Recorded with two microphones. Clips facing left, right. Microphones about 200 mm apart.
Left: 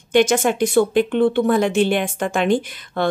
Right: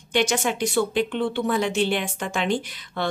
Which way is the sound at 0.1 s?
50° left (ahead or behind).